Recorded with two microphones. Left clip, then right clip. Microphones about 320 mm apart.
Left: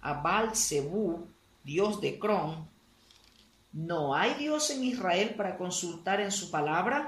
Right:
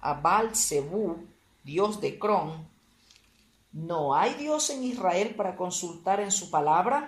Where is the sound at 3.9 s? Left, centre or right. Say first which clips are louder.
Right 4 dB; centre.